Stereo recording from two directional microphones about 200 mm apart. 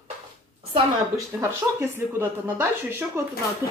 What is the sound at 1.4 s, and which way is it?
Speech, 10° right (ahead or behind).